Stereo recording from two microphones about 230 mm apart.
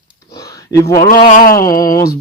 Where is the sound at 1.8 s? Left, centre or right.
Centre.